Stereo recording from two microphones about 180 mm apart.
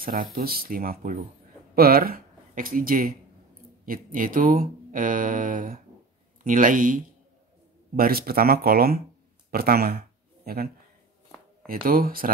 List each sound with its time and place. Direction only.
0.0 s speech: 55° right (ahead or behind)